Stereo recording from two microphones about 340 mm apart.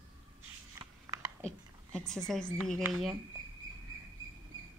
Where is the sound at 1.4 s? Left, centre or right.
Centre.